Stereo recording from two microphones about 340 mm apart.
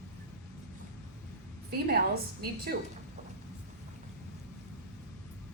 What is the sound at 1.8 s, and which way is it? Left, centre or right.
Speech, right.